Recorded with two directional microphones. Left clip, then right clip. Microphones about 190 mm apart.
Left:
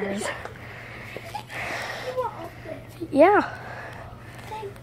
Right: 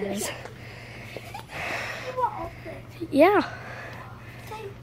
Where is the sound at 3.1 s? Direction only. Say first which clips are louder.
Left 2 dB; 15° right (ahead or behind).